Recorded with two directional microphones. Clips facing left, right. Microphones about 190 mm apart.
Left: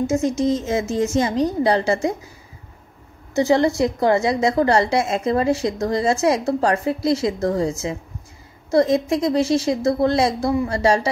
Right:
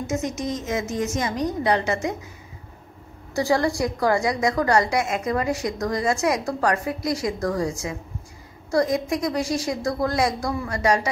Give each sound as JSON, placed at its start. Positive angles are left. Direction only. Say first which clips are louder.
{"t": 0.0, "sound": "a woman's voice", "louder": "left 7 dB", "side_deg": 30}
{"t": 3.3, "sound": "a woman's voice", "louder": "left 5 dB", "side_deg": 20}